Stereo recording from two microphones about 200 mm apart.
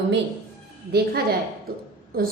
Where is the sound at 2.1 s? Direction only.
50° right (ahead or behind).